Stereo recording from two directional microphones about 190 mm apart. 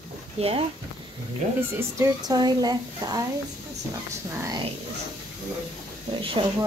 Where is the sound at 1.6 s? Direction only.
10° right (ahead or behind).